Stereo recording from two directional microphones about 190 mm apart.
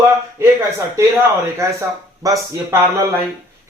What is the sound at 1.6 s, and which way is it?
Speech, 15° right (ahead or behind).